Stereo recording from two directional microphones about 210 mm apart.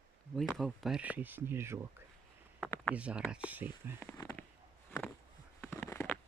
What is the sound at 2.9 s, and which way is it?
Speech, 5° right (ahead or behind).